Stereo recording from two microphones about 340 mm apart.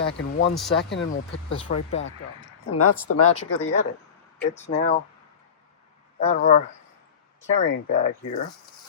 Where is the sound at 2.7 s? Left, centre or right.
Left.